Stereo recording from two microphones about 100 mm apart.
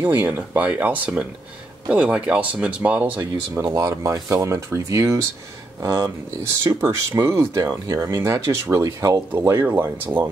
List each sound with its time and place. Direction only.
0.1 s speech: 20° right (ahead or behind)
3.2 s speech: 30° right (ahead or behind)